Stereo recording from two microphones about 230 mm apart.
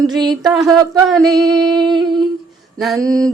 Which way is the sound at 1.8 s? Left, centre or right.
Centre.